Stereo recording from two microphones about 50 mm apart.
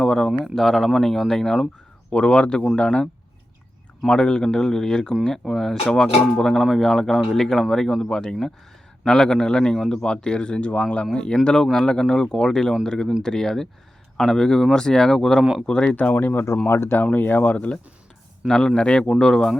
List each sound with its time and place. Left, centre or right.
0.0 s a sound: centre
0.4 s a man's voice: centre
4.1 s a man's voice: centre
16.0 s speech: left
16.6 s speech: left
17.1 s speech: left
18.4 s a man's voice: centre